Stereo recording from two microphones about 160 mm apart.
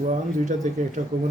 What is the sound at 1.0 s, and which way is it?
Speech, 55° right (ahead or behind).